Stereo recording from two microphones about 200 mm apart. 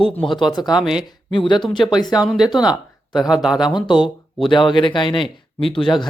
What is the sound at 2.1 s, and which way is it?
Speech, centre (ahead or behind).